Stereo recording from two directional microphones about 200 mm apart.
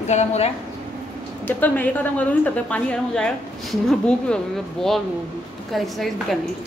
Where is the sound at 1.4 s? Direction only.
10° left (ahead or behind).